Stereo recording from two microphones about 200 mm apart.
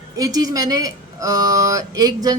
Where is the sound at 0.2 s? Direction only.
20° right (ahead or behind).